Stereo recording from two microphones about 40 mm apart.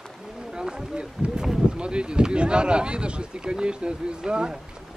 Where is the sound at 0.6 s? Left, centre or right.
Centre.